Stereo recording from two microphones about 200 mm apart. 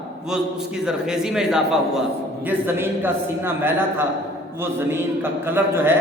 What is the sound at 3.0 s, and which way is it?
A woman's voice, 10° right (ahead or behind).